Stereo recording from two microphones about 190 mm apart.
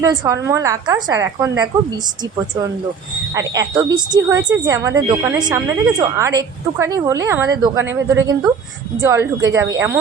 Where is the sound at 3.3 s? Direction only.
15° right (ahead or behind).